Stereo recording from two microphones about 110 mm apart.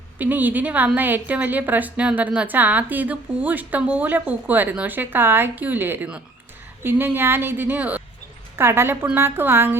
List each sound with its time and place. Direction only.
0.2 s a woman's voice: 15° right (ahead or behind)